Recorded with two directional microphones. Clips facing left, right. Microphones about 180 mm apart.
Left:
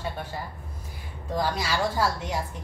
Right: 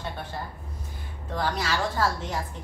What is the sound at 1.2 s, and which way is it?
A woman's voice, 10° left (ahead or behind).